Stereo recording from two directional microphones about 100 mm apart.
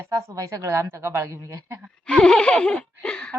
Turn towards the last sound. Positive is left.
turn(degrees=10)  # may be behind; listen again after turning